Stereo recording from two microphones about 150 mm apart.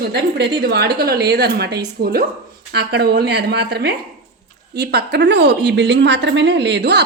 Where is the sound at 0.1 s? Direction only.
90° right.